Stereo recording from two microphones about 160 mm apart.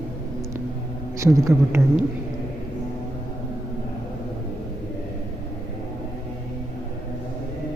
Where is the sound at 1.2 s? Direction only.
20° right (ahead or behind).